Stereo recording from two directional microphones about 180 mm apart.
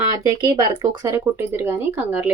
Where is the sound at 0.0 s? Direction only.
20° right (ahead or behind).